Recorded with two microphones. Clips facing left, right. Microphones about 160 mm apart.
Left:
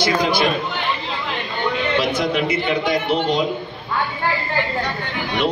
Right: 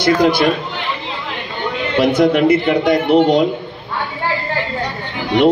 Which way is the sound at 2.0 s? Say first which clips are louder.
Right 11 dB; 55° right (ahead or behind).